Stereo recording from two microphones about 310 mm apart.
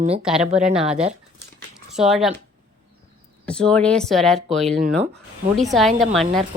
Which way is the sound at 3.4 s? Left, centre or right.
Centre.